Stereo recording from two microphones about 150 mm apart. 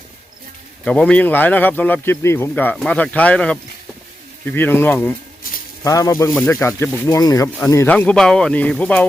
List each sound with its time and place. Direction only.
0.9 s speech: 5° left (ahead or behind)
7.9 s speech: 5° left (ahead or behind)